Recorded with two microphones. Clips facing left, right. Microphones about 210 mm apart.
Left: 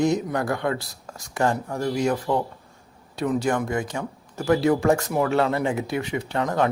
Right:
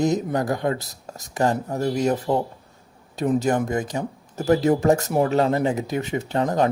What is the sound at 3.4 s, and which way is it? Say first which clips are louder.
Speech: right 2 dB; 40° right (ahead or behind).